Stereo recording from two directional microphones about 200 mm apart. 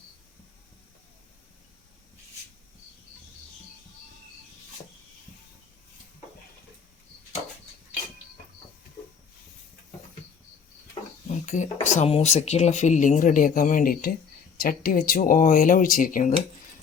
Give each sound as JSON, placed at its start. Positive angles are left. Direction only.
{"t": 11.4, "sound": "speech", "side_deg": 35}